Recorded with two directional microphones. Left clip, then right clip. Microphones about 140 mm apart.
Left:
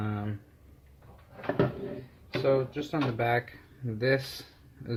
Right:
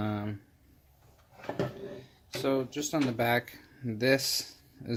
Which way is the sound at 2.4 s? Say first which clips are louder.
Left 4 dB; 75° right (ahead or behind).